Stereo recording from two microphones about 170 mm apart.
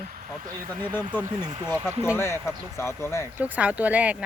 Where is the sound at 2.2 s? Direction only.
15° left (ahead or behind).